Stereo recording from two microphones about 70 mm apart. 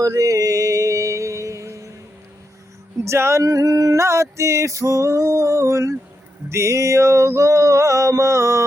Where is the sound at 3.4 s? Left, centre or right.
Right.